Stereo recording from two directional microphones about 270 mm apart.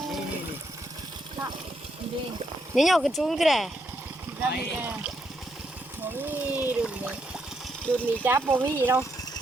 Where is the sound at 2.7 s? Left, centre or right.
Centre.